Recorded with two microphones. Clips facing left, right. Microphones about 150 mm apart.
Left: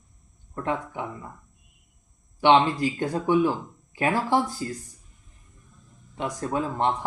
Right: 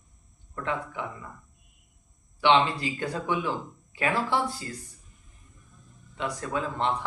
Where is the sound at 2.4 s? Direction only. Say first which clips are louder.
Left 3 dB; 45° left (ahead or behind).